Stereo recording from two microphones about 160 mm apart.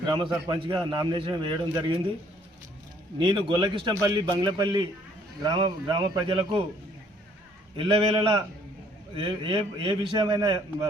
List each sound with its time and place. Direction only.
0.0 s a man's voice: 30° right (ahead or behind)
3.2 s a man's voice: 30° right (ahead or behind)
7.8 s a man's voice: 35° right (ahead or behind)